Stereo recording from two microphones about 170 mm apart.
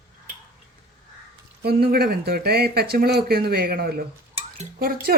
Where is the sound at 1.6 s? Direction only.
65° right (ahead or behind).